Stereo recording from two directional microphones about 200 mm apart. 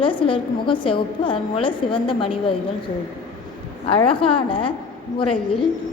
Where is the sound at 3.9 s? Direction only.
25° left (ahead or behind).